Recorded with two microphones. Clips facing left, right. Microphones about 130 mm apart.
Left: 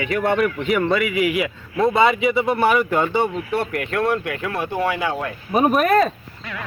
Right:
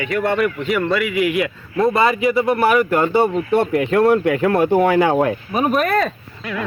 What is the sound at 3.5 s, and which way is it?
Speech, 25° right (ahead or behind).